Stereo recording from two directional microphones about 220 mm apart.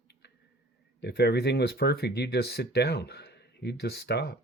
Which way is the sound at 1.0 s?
50° left (ahead or behind).